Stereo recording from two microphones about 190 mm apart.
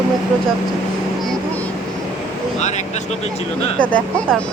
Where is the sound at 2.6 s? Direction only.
40° left (ahead or behind).